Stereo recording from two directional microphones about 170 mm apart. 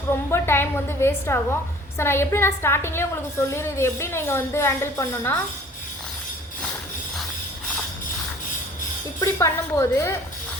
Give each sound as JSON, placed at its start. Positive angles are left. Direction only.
{"t": 0.1, "sound": "a woman's voice", "side_deg": 15}
{"t": 9.2, "sound": "a woman's voice", "side_deg": 15}